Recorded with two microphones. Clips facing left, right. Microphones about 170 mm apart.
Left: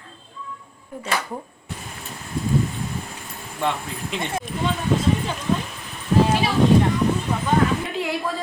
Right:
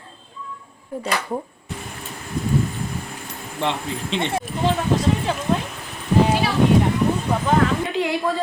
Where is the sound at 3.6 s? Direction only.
25° right (ahead or behind).